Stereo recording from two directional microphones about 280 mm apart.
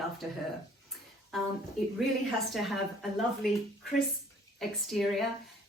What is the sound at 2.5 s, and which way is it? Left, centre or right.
Speech, centre.